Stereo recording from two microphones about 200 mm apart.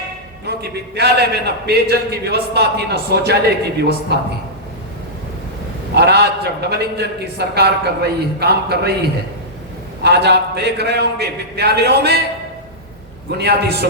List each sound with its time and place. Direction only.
0.4 s a man's voice: 55° right (ahead or behind)
5.9 s a man's voice: 55° right (ahead or behind)
10.0 s a man's voice: 55° right (ahead or behind)
13.3 s a man's voice: 55° right (ahead or behind)